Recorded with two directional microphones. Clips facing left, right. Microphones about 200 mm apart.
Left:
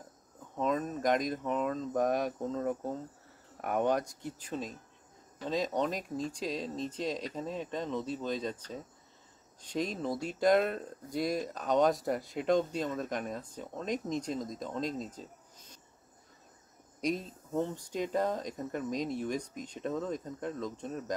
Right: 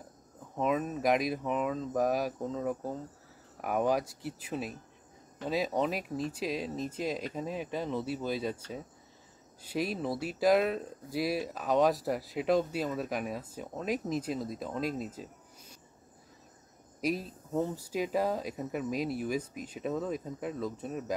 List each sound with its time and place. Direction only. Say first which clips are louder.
0.6 s speech: right 1 dB; 5° right (ahead or behind)
17.0 s speech: right 1 dB; 5° right (ahead or behind)